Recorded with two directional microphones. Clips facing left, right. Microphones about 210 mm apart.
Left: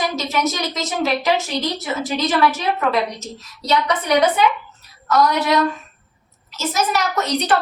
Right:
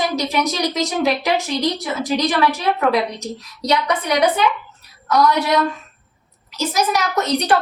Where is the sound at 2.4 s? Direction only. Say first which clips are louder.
Even; 15° right (ahead or behind).